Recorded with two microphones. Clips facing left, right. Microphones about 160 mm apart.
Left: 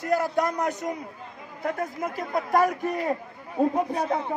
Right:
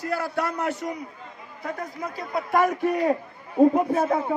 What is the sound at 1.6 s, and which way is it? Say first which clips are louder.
A man's voice: left 3 dB; 50° left (ahead or behind).